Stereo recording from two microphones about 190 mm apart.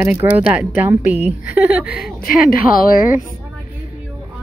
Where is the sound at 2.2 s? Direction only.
50° left (ahead or behind).